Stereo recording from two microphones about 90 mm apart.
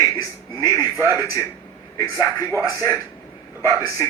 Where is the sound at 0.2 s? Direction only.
45° left (ahead or behind).